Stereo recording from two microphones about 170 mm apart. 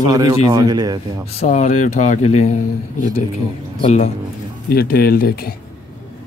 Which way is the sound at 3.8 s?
40° left (ahead or behind).